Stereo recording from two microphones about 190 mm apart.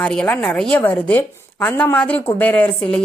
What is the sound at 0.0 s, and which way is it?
A woman's voice, 5° left (ahead or behind).